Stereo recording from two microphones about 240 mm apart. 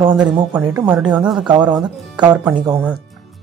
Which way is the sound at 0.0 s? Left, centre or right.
Centre.